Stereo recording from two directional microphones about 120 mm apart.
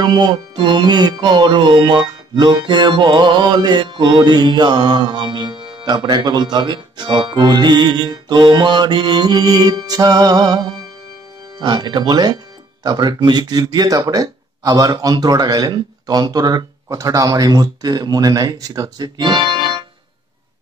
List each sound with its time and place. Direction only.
0.0 s music: 35° right (ahead or behind)